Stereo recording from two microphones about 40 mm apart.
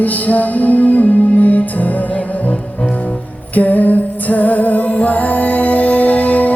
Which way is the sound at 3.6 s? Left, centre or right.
Left.